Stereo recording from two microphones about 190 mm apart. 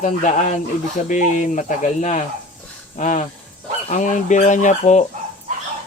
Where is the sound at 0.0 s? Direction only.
40° left (ahead or behind).